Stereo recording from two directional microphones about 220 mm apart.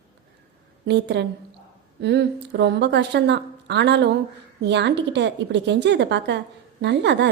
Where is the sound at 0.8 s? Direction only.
50° right (ahead or behind).